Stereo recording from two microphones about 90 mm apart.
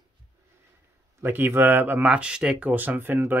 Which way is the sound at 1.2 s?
25° right (ahead or behind).